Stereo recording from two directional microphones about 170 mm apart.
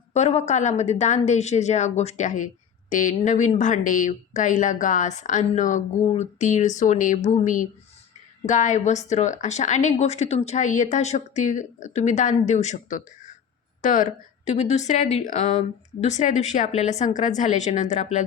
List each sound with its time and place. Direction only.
0.1 s a woman's voice: 40° left (ahead or behind)